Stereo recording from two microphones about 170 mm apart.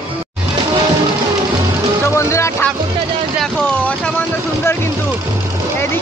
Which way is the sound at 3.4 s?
10° left (ahead or behind).